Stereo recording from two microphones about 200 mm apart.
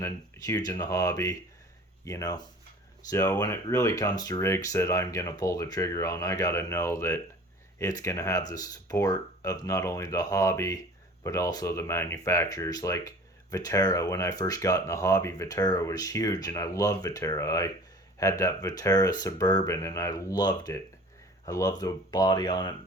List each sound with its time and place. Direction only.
0.0 s speech: 20° left (ahead or behind)